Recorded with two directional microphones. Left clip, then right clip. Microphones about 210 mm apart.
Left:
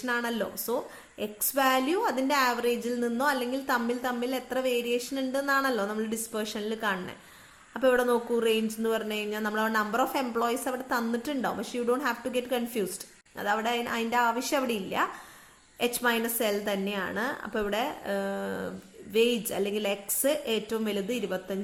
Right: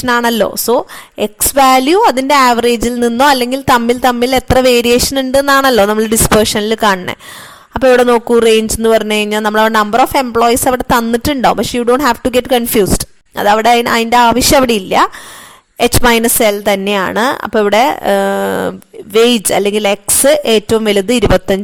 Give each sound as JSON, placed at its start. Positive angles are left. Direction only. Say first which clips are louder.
{"t": 0.0, "sound": "a woman's voice", "louder": "right 19 dB", "side_deg": -50}